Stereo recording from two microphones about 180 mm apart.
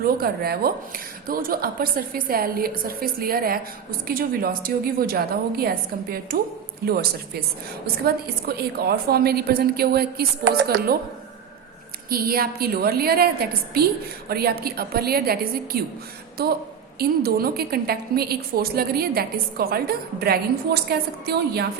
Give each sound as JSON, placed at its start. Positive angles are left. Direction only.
{"t": 0.0, "sound": "a woman's voice", "side_deg": -55}
{"t": 12.0, "sound": "a woman's voice", "side_deg": -55}
{"t": 17.0, "sound": "a woman's voice", "side_deg": -55}